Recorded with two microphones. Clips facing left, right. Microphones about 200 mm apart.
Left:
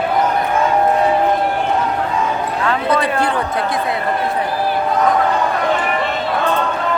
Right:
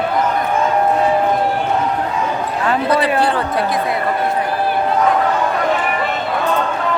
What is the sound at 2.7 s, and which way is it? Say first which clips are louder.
Basketball bounce: right 2 dB; 20° right (ahead or behind).